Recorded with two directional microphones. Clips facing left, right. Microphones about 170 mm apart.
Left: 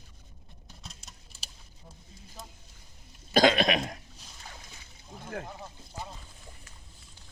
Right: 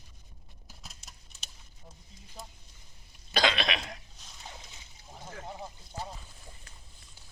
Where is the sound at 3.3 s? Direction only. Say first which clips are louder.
Left 7 dB; 45° left (ahead or behind).